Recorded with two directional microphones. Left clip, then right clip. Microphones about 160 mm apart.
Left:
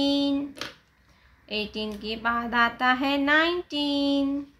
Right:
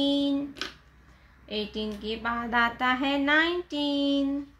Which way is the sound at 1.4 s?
15° left (ahead or behind).